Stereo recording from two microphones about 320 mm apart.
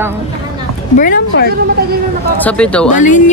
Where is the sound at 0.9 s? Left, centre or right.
Left.